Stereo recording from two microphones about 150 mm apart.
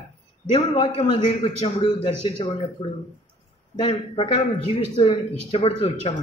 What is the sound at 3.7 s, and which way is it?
A man's voice, 40° left (ahead or behind).